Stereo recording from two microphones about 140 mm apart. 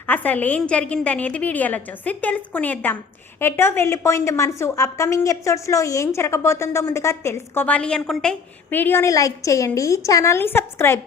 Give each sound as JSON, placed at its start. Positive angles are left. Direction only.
{"t": 0.1, "sound": "a woman's voice", "side_deg": 10}